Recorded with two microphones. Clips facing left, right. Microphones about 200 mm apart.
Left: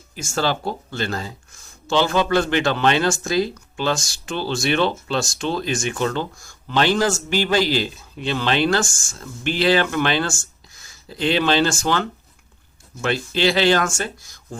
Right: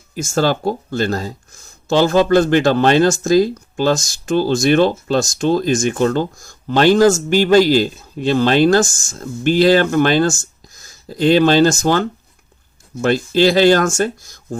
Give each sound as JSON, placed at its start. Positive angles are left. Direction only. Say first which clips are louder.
{"t": 0.2, "sound": "speech", "louder": "right 6 dB", "side_deg": -45}